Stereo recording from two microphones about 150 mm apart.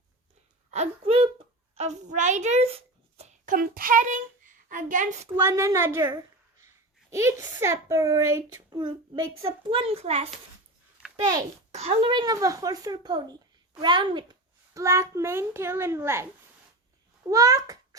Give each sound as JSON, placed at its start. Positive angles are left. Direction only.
{"t": 0.7, "sound": "a woman's voice", "side_deg": -45}
{"t": 5.4, "sound": "a woman's voice", "side_deg": -20}
{"t": 7.1, "sound": "a child's voice", "side_deg": -20}
{"t": 9.6, "sound": "a woman's voice", "side_deg": -40}
{"t": 11.7, "sound": "a child's voice", "side_deg": -45}
{"t": 12.1, "sound": "a child's voice", "side_deg": -25}
{"t": 17.2, "sound": "a child's voice", "side_deg": -20}